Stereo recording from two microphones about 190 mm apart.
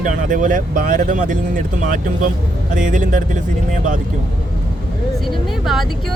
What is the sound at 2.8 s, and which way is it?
Speech, 40° right (ahead or behind).